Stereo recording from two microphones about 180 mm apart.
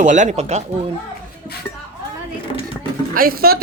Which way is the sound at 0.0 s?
40° right (ahead or behind).